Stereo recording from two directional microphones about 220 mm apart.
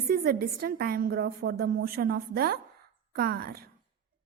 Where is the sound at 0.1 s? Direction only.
45° right (ahead or behind).